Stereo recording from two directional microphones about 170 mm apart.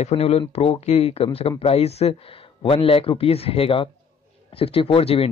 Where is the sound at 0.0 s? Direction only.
35° left (ahead or behind).